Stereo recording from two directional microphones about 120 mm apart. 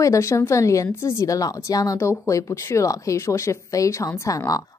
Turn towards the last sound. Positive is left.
turn(degrees=30)  # may be behind; listen again after turning